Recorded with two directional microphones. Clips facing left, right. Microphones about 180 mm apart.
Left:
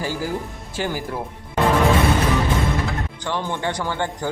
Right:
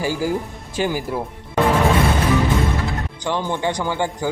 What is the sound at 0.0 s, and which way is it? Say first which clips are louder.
Speech: right 4 dB; 15° right (ahead or behind).